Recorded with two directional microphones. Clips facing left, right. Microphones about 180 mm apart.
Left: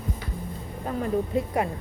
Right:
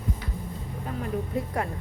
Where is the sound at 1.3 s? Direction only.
20° left (ahead or behind).